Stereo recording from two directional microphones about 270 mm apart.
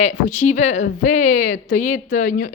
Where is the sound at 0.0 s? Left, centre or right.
Left.